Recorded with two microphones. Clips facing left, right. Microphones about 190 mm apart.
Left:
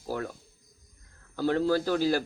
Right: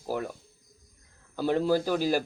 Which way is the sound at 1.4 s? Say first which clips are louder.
Even; 15° right (ahead or behind).